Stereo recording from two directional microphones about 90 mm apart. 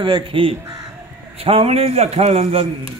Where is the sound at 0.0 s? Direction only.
75° right (ahead or behind).